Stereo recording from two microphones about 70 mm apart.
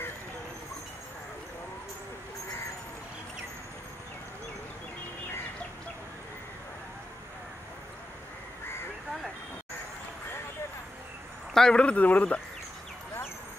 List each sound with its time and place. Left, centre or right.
11.5 s speech: centre